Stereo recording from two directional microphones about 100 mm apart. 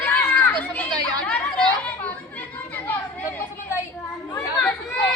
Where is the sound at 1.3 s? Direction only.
15° left (ahead or behind).